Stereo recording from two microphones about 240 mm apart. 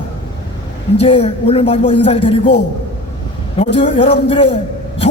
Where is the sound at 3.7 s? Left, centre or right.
Left.